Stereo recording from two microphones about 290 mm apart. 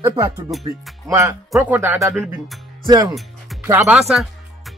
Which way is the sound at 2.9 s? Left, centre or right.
Centre.